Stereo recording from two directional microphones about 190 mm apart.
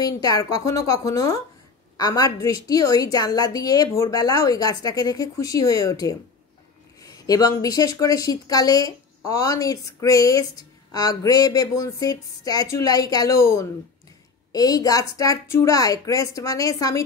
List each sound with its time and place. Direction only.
0.0 s a woman's voice: 20° left (ahead or behind)